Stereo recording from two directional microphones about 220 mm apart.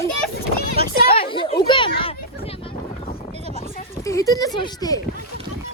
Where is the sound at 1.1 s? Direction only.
25° left (ahead or behind).